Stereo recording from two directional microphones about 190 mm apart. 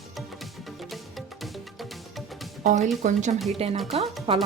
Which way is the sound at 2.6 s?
40° right (ahead or behind).